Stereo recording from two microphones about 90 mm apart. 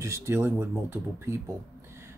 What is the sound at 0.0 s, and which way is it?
Speech, 30° right (ahead or behind).